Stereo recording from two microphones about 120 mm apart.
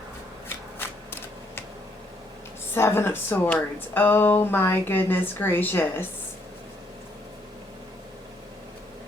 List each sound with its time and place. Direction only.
0.4 s shuffling cards: 20° left (ahead or behind)
2.7 s speech: 20° left (ahead or behind)